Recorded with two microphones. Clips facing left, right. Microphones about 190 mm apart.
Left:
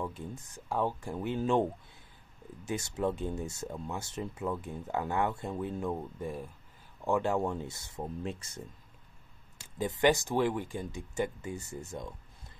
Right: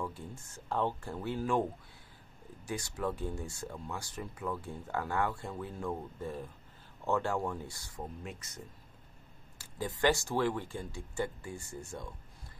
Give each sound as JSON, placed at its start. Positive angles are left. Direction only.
{"t": 0.0, "sound": "speech", "side_deg": 20}